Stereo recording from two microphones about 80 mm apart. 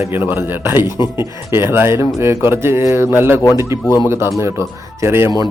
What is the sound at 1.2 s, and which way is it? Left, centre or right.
Speech, right.